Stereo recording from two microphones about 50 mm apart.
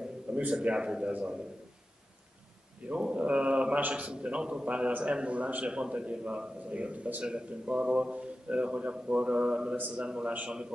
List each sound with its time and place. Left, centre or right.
0.3 s speech: right
2.9 s speech: right